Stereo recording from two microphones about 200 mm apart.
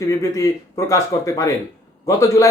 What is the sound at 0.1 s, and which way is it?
A man's voice, 15° left (ahead or behind).